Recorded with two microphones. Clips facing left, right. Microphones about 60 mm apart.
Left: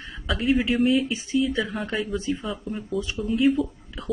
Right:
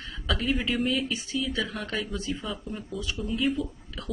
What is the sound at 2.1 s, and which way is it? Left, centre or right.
Speech, left.